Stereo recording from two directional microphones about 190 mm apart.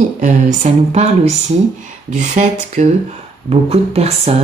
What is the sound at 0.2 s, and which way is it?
Speech, 40° right (ahead or behind).